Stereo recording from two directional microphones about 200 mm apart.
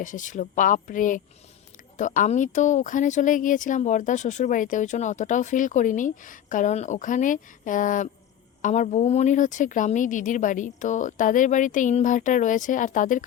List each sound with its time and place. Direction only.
0.0 s speech: 40° left (ahead or behind)